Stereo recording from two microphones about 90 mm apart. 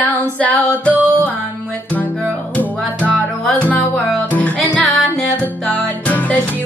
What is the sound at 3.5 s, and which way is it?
Music, 15° left (ahead or behind).